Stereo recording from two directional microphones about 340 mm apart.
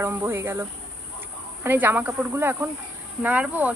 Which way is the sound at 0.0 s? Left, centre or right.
Centre.